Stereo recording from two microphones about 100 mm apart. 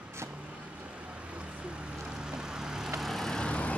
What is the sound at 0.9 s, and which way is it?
Vehicle, 10° right (ahead or behind).